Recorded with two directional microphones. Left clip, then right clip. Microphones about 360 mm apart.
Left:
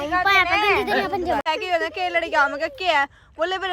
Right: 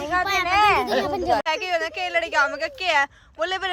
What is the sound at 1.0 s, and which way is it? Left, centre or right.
Speech, left.